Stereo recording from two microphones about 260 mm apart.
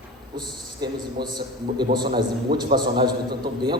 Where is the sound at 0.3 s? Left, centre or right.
Centre.